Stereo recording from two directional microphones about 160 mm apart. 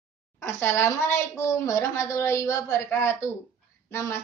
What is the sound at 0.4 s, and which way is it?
A woman's voice, 15° left (ahead or behind).